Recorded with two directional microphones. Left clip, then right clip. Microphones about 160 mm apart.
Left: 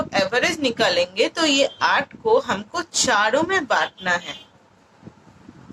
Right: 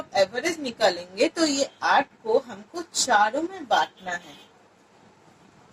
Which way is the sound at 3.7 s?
35° left (ahead or behind).